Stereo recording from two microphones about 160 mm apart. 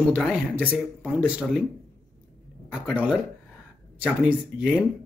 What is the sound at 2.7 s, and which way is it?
Speech, 5° right (ahead or behind).